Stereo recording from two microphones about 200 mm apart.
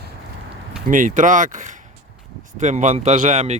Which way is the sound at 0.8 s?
40° right (ahead or behind).